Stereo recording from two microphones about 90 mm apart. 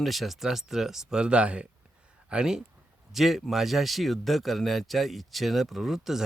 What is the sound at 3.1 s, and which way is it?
Speech, centre (ahead or behind).